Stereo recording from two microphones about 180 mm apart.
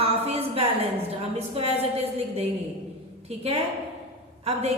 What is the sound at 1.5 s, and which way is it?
Speech, 30° right (ahead or behind).